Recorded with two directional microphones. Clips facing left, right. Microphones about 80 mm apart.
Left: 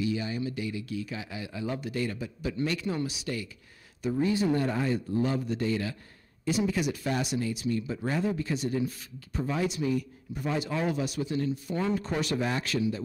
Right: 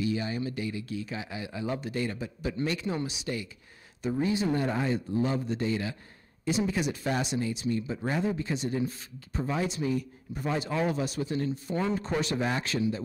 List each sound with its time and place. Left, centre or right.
0.0 s speech: right